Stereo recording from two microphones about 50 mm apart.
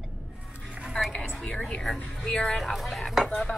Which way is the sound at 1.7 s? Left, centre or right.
Centre.